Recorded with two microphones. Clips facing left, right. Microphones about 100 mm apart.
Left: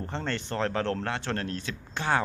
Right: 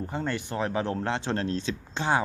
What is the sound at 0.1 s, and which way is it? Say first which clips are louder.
Speech: left 1 dB; 10° right (ahead or behind).